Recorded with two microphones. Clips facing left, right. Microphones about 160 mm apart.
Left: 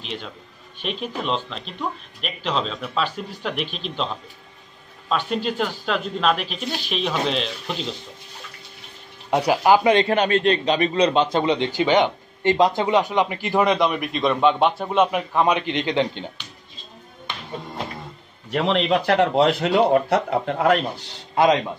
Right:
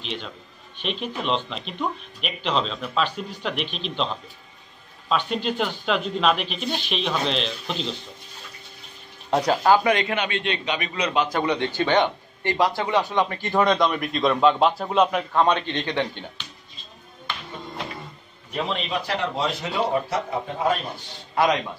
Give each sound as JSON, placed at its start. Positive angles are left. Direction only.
{"t": 0.8, "sound": "speech", "side_deg": 5}
{"t": 5.1, "sound": "speech", "side_deg": 5}
{"t": 9.3, "sound": "a man's voice", "side_deg": 10}
{"t": 9.8, "sound": "a man's voice", "side_deg": 30}
{"t": 18.5, "sound": "a man's voice", "side_deg": 80}